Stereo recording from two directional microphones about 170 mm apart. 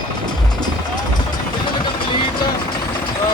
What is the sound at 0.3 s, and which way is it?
Music, 25° left (ahead or behind).